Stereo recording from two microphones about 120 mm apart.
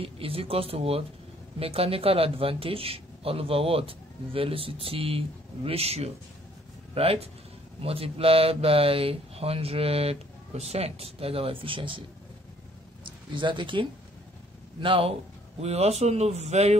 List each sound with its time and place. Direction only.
0.0 s speech: 50° right (ahead or behind)
13.3 s speech: 40° right (ahead or behind)
15.6 s speech: 60° right (ahead or behind)